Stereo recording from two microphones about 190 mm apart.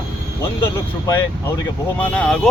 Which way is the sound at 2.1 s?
5° left (ahead or behind).